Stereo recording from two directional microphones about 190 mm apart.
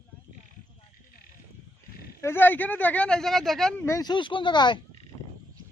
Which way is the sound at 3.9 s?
20° left (ahead or behind).